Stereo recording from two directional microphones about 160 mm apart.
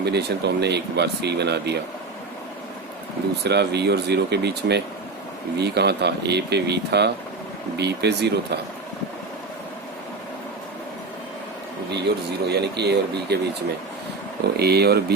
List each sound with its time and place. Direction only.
0.0 s speech: 90° right
3.4 s speech: 90° right
12.5 s speech: 90° right
14.5 s speech: 85° right